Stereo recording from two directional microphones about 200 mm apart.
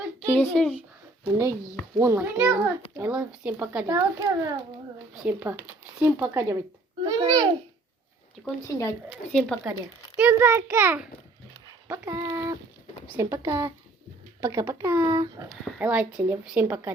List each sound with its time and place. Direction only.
0.3 s a child's voice: 5° left (ahead or behind)
1.2 s a child's voice: 15° right (ahead or behind)
8.4 s a child's voice: 15° left (ahead or behind)
10.2 s a child's voice: 10° right (ahead or behind)